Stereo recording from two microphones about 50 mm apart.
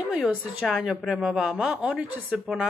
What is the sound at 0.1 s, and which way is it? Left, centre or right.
A woman's voice, centre.